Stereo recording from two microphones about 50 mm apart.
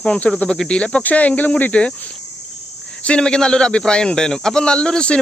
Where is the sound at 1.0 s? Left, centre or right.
Left.